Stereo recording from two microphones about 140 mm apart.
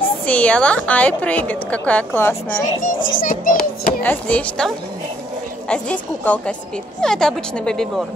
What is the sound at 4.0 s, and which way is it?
Speech, 10° left (ahead or behind).